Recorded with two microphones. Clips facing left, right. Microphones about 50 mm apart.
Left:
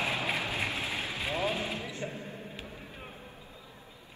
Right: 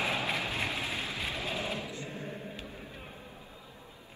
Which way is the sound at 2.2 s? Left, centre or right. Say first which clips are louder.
Right 2 dB; right.